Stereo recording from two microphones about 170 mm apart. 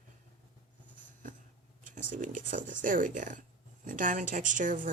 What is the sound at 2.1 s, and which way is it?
Speech, 50° right (ahead or behind).